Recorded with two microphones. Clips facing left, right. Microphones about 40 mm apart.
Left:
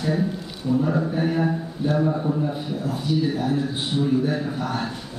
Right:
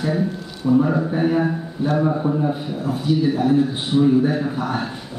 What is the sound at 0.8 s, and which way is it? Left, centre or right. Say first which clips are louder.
A man's voice: right 3 dB; centre.